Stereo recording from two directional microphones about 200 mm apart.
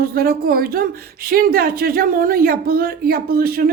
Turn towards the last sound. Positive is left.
turn(degrees=-50)  # may be behind; listen again after turning